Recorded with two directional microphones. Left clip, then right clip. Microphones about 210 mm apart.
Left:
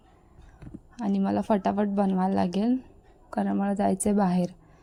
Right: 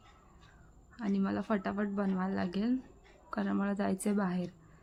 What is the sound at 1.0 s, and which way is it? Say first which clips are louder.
A woman's voice: left 8 dB; 20° left (ahead or behind).